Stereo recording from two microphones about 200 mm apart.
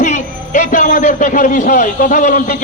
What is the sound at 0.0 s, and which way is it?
Speech, 40° left (ahead or behind).